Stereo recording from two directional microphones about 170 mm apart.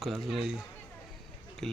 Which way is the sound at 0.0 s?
Centre (ahead or behind).